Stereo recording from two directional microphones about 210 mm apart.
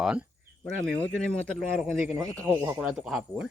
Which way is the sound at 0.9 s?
5° left (ahead or behind).